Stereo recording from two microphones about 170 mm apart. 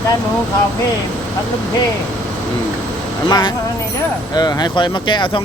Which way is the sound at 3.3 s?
25° left (ahead or behind).